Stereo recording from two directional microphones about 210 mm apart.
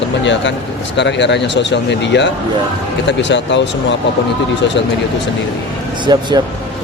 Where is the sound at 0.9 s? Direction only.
55° left (ahead or behind).